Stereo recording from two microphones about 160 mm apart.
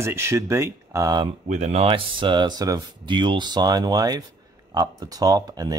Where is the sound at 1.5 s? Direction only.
45° right (ahead or behind).